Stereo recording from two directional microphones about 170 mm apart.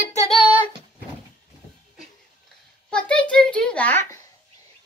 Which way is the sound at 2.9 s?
5° left (ahead or behind).